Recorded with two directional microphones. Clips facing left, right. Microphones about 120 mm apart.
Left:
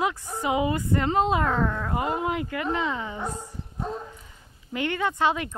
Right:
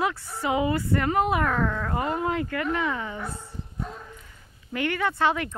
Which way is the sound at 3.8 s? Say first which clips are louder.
Left 5 dB; 25° left (ahead or behind).